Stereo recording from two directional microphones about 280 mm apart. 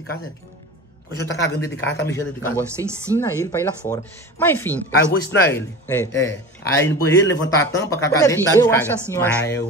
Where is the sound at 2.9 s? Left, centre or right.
Centre.